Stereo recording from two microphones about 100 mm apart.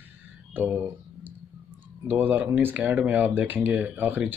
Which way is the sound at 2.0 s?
20° right (ahead or behind).